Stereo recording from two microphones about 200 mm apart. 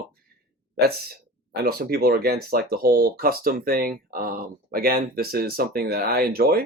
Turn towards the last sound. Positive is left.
turn(degrees=-50)  # may be behind; listen again after turning